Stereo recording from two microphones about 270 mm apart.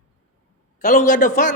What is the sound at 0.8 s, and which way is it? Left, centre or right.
Speech, left.